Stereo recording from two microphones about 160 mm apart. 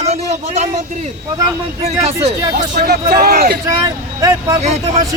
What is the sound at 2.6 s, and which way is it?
Speech, 80° right.